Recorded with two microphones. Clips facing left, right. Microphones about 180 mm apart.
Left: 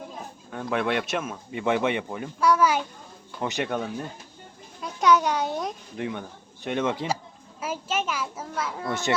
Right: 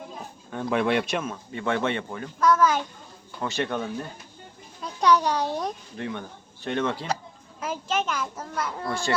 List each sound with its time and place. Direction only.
0.5 s speech: centre (ahead or behind)
4.8 s a child's voice: centre (ahead or behind)
6.0 s speech: 15° left (ahead or behind)
7.6 s speech: 5° left (ahead or behind)
8.9 s a child's voice: 20° left (ahead or behind)